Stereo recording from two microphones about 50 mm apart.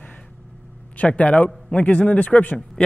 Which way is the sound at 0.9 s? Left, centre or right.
Left.